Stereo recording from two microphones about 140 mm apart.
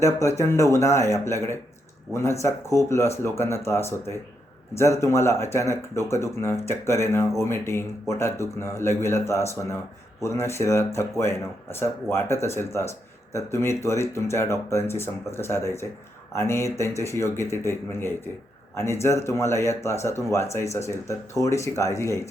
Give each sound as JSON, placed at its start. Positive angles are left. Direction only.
{"t": 0.0, "sound": "speech", "side_deg": 20}